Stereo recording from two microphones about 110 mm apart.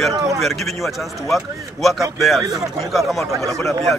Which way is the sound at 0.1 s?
30° right (ahead or behind).